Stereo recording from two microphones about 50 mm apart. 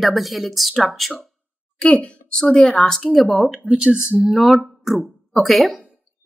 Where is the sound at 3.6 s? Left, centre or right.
Centre.